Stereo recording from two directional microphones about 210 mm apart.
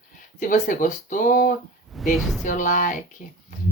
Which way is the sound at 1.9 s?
Centre (ahead or behind).